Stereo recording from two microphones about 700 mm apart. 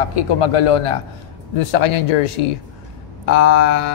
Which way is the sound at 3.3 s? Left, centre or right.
Left.